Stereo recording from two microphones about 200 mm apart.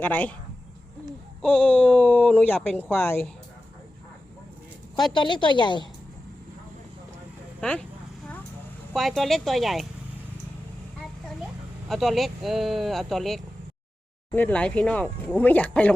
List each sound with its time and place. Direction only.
0.0 s speech: 10° left (ahead or behind)
1.4 s speech: 5° left (ahead or behind)
5.1 s a woman's voice: 25° left (ahead or behind)
7.6 s speech: 5° left (ahead or behind)
8.9 s speech: centre (ahead or behind)
11.9 s speech: centre (ahead or behind)